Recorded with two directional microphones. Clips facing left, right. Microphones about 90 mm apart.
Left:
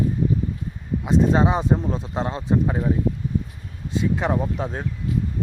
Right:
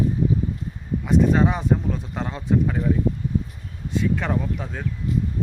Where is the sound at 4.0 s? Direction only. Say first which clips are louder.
Left 2 dB; 20° left (ahead or behind).